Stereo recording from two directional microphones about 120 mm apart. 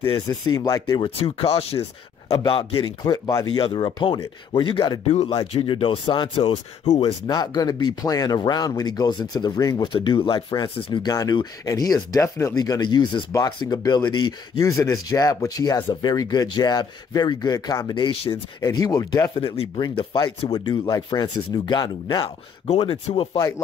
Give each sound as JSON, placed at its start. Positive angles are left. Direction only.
{"t": 0.0, "sound": "speech", "side_deg": 40}
{"t": 1.2, "sound": "speech", "side_deg": 55}
{"t": 2.5, "sound": "speech", "side_deg": 40}
{"t": 5.0, "sound": "speech", "side_deg": 55}
{"t": 7.0, "sound": "speech", "side_deg": 35}
{"t": 14.7, "sound": "speech", "side_deg": 25}
{"t": 19.3, "sound": "speech", "side_deg": 55}
{"t": 19.8, "sound": "speech", "side_deg": 40}
{"t": 22.7, "sound": "speech", "side_deg": 60}